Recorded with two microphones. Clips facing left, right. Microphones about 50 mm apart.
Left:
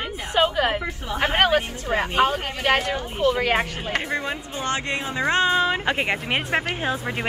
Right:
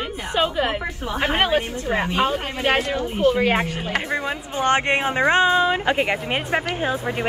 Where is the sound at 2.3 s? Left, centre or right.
Right.